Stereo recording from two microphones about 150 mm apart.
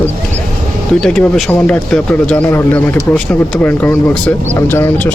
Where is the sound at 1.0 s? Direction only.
5° left (ahead or behind).